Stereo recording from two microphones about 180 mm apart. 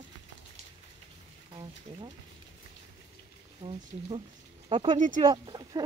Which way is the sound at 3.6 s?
30° right (ahead or behind).